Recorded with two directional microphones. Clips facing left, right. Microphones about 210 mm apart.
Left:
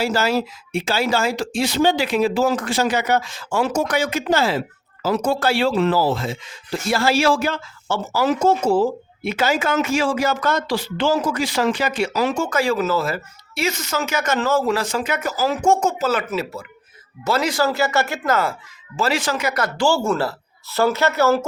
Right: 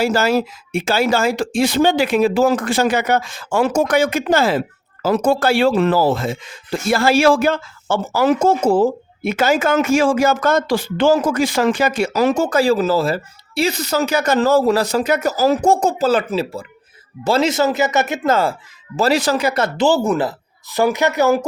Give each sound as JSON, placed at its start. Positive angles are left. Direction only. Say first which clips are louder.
{"t": 0.0, "sound": "a man's voice", "louder": "right 4 dB", "side_deg": -50}